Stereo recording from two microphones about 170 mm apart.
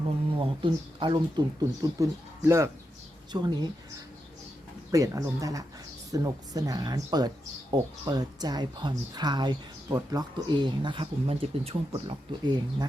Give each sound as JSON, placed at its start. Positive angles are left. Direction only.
{"t": 0.3, "sound": "a woman's voice", "side_deg": -30}
{"t": 3.3, "sound": "a woman's voice", "side_deg": -25}
{"t": 4.9, "sound": "a woman's voice", "side_deg": -20}